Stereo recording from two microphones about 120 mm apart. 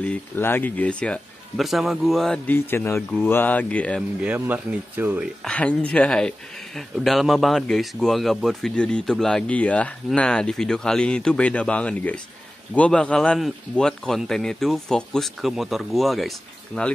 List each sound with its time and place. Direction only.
0.0 s speech: 15° left (ahead or behind)
1.6 s a man's voice: centre (ahead or behind)
2.4 s speech: 15° left (ahead or behind)
4.2 s speech: 15° right (ahead or behind)
5.4 s a man's voice: 10° left (ahead or behind)